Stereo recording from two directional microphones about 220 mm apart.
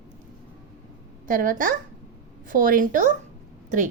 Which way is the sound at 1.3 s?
40° right (ahead or behind).